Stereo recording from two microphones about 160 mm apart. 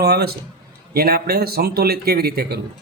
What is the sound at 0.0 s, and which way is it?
A man's voice, 80° right.